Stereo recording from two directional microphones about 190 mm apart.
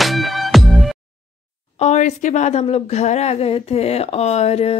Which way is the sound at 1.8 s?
40° left (ahead or behind).